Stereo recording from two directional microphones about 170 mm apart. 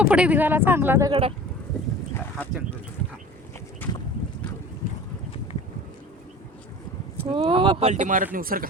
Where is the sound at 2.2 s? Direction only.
10° left (ahead or behind).